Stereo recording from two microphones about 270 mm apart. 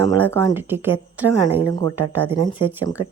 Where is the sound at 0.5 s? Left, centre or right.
Centre.